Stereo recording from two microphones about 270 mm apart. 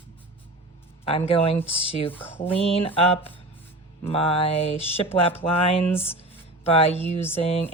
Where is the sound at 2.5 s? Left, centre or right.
Left.